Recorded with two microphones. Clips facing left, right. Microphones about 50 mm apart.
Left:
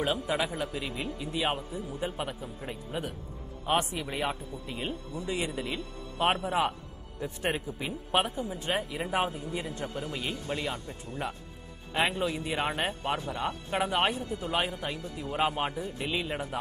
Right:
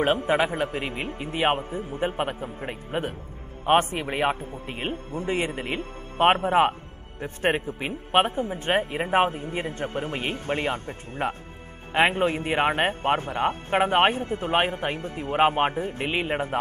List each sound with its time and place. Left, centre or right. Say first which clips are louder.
0.0 s speech: right 7 dB; right